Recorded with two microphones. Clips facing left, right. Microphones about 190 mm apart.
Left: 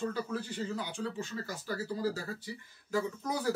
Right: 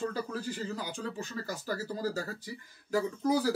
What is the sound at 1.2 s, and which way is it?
Speech, 40° right (ahead or behind).